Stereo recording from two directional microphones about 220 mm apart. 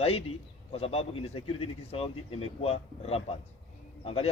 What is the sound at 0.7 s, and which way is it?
Speech, 25° left (ahead or behind).